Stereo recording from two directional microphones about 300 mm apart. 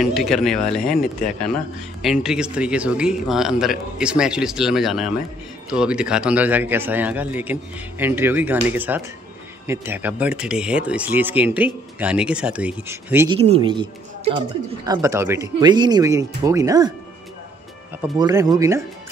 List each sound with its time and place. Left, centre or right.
0.0 s a woman's voice: centre
18.0 s speech: centre